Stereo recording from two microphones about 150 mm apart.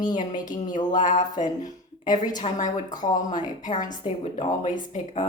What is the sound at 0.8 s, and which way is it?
Speech, 55° left (ahead or behind).